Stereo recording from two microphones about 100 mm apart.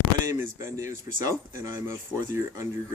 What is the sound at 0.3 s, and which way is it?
Speech, 30° right (ahead or behind).